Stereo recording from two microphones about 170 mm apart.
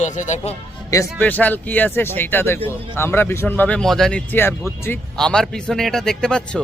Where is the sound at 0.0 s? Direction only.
45° left (ahead or behind).